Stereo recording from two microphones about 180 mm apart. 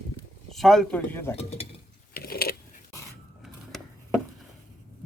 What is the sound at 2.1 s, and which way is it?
Mechanisms, 55° left (ahead or behind).